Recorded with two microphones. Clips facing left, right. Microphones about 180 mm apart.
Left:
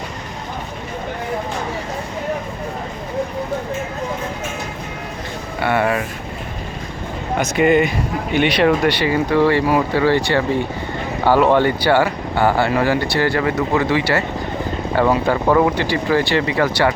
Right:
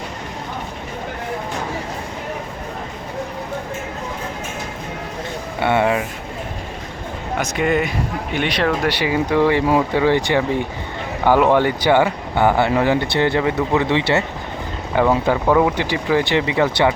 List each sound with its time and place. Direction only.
5.5 s speech: 20° right (ahead or behind)
7.3 s speech: centre (ahead or behind)
8.9 s speech: 10° right (ahead or behind)
15.4 s speech: 5° right (ahead or behind)
15.8 s speech: 15° right (ahead or behind)